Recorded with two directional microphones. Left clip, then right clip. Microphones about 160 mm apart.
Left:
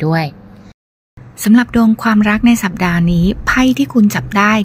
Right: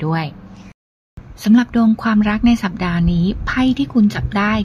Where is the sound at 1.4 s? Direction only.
10° left (ahead or behind).